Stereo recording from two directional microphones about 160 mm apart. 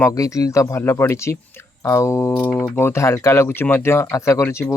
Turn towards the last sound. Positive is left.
turn(degrees=15)  # may be behind; listen again after turning